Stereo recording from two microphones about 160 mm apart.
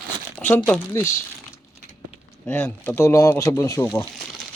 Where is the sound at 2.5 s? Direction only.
10° left (ahead or behind).